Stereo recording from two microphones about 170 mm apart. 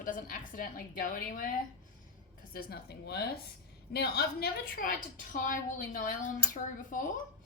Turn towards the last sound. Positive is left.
turn(degrees=50)  # may be behind; listen again after turning